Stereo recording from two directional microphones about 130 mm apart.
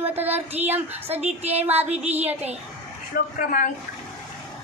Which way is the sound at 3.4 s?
90° left.